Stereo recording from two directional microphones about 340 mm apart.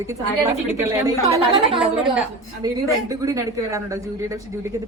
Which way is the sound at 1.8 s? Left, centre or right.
Centre.